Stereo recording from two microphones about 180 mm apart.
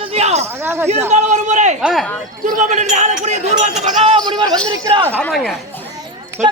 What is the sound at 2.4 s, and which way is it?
Speech, 45° right (ahead or behind).